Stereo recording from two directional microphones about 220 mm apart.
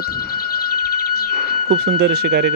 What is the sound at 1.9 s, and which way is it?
Speech, 50° right (ahead or behind).